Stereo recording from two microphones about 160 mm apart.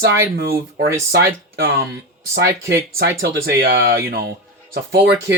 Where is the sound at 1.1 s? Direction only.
85° right.